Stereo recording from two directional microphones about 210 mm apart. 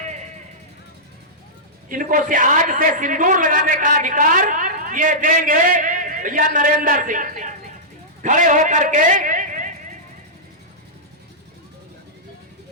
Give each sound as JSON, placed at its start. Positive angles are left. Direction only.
{"t": 0.0, "sound": "vehicle", "side_deg": -35}
{"t": 1.9, "sound": "a man's voice", "side_deg": -40}